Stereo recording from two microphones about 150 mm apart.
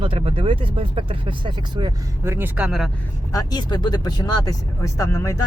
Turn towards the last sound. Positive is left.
turn(degrees=20)  # may be behind; listen again after turning